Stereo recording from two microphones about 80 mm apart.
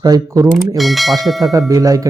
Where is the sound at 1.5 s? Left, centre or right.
Right.